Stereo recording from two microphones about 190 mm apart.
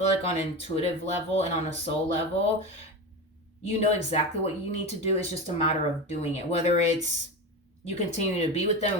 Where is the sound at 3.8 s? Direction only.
35° left (ahead or behind).